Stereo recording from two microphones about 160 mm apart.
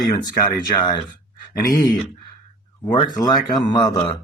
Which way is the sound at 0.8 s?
30° left (ahead or behind).